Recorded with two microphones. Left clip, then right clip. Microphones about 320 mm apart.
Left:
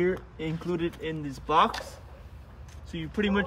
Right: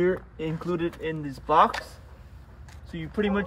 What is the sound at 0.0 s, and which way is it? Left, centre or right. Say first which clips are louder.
Speech: right 3 dB; centre.